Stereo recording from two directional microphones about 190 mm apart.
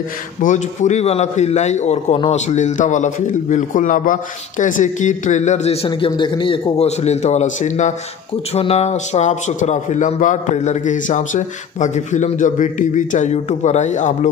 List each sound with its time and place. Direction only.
0.4 s a man's voice: 40° left (ahead or behind)